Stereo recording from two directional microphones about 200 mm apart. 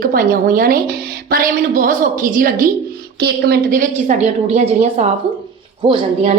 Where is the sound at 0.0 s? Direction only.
45° right (ahead or behind); by 6.3 s 25° right (ahead or behind).